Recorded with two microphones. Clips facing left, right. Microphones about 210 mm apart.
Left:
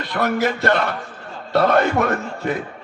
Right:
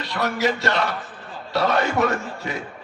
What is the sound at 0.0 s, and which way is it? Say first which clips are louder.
A man's voice: left 3 dB; 55° left (ahead or behind).